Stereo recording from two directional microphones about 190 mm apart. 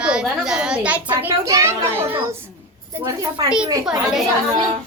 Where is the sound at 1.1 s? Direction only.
15° right (ahead or behind).